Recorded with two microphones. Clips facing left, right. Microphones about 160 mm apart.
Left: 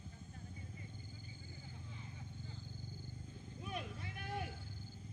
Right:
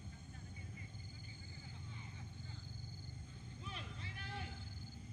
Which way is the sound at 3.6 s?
55° left (ahead or behind).